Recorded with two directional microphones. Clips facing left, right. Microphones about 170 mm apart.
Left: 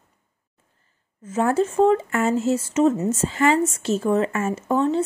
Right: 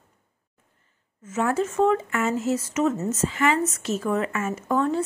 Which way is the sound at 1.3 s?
35° left (ahead or behind).